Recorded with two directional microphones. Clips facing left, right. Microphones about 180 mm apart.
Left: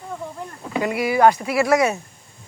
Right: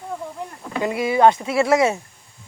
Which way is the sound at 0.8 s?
25° right (ahead or behind).